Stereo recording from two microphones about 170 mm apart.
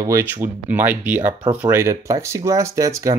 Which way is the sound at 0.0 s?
15° right (ahead or behind).